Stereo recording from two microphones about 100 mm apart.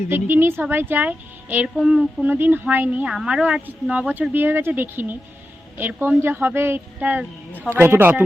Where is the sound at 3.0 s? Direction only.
10° right (ahead or behind).